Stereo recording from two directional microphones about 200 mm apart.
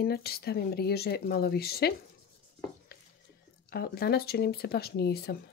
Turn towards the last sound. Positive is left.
turn(degrees=55)  # may be behind; listen again after turning